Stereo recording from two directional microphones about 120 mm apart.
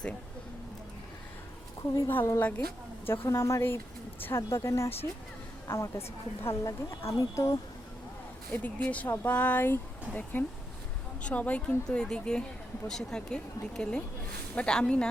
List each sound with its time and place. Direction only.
2.0 s a woman's voice: 20° left (ahead or behind)
8.6 s speech: 15° left (ahead or behind)